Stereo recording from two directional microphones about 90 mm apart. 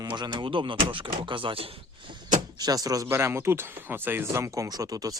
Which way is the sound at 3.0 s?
30° right (ahead or behind).